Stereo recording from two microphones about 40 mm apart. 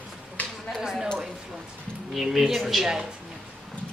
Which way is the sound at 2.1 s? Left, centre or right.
Centre.